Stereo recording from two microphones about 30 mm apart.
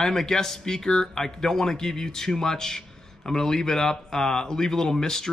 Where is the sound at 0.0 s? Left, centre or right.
Centre.